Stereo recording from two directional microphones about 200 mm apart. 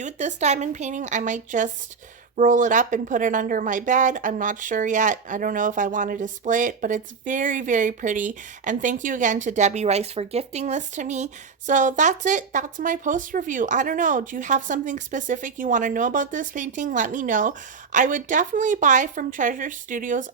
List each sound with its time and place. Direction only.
0.0 s speech: 35° right (ahead or behind)